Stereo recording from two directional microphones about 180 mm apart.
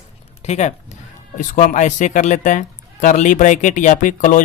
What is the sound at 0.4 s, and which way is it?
Speech, 40° left (ahead or behind).